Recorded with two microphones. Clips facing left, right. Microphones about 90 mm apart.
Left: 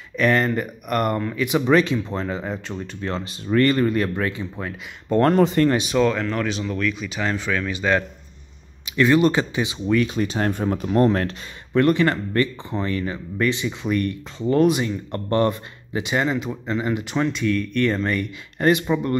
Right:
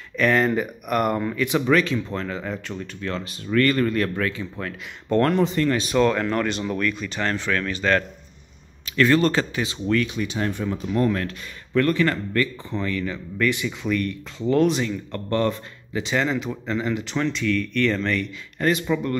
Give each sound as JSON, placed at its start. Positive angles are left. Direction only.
{"t": 0.2, "sound": "speech", "side_deg": 0}
{"t": 1.7, "sound": "speech", "side_deg": 20}
{"t": 5.4, "sound": "speech", "side_deg": 50}
{"t": 5.9, "sound": "speech", "side_deg": 0}
{"t": 10.0, "sound": "speech", "side_deg": 40}
{"t": 11.1, "sound": "speech", "side_deg": 30}
{"t": 16.8, "sound": "speech", "side_deg": 15}